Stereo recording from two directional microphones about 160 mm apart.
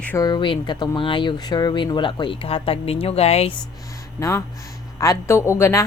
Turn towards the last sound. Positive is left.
turn(degrees=15)  # may be behind; listen again after turning